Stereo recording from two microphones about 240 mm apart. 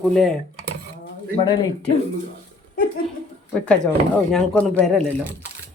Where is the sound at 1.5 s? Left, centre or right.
Centre.